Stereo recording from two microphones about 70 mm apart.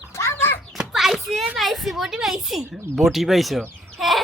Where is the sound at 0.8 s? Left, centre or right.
Centre.